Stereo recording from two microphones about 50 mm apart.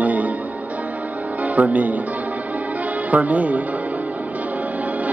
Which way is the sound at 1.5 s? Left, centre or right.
Right.